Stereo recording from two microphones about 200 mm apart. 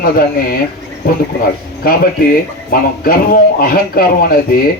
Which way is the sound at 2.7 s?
45° left (ahead or behind).